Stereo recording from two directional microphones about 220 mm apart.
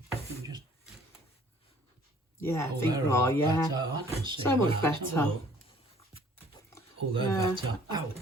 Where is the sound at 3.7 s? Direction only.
20° right (ahead or behind).